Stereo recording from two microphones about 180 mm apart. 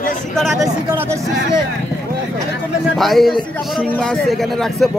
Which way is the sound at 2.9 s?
Centre (ahead or behind).